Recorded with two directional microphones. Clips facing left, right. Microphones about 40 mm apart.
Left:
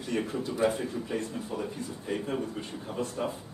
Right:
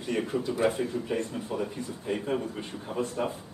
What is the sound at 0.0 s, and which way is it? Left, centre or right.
Speech, right.